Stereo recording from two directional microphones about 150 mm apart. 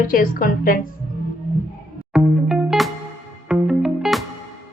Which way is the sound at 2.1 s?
Centre (ahead or behind).